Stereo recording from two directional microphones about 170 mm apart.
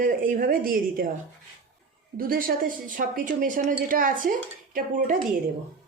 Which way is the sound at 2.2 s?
55° right (ahead or behind).